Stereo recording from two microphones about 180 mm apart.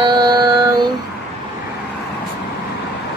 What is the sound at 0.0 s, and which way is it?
Mantra, 25° right (ahead or behind).